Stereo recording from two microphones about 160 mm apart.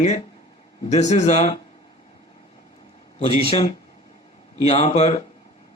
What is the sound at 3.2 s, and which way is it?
Speech, 35° left (ahead or behind).